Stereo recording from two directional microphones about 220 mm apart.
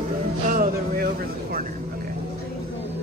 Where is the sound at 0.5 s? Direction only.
40° right (ahead or behind).